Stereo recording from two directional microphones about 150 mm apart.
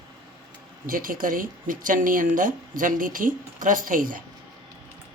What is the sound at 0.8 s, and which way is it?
Speech, 70° right (ahead or behind).